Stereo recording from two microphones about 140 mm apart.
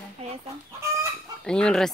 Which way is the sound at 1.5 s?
5° left (ahead or behind).